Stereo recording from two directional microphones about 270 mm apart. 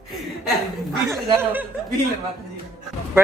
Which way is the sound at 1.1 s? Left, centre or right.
Centre.